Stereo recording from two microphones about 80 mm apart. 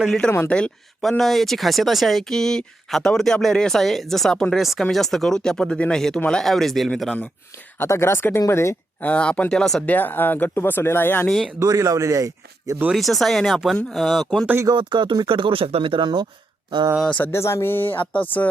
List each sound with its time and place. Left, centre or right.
0.4 s speech: centre
1.2 s speech: centre
7.8 s speech: left
9.0 s speech: centre
9.8 s speech: left
11.6 s a man's voice: right
12.9 s speech: centre
14.8 s speech: right
17.1 s speech: centre
17.3 s speech: left